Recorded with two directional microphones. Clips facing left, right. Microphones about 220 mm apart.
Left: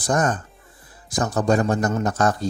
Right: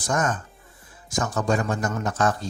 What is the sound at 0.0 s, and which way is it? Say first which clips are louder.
Speech: left 4 dB; 35° left (ahead or behind).